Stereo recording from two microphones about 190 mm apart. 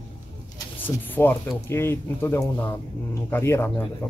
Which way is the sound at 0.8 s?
10° left (ahead or behind).